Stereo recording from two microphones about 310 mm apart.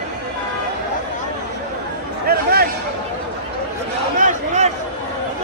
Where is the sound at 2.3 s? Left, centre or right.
Right.